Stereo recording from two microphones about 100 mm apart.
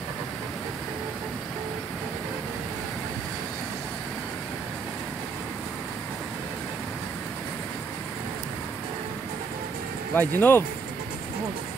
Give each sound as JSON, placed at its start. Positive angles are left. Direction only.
{"t": 10.1, "sound": "speech", "side_deg": 20}